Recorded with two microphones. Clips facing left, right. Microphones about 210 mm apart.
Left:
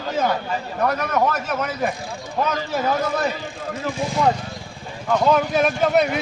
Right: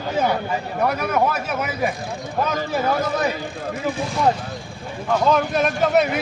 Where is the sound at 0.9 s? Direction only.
10° right (ahead or behind).